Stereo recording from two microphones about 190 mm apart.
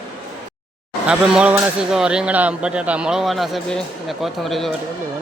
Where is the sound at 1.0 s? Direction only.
5° right (ahead or behind).